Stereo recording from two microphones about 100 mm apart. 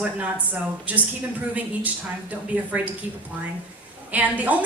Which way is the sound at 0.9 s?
15° right (ahead or behind).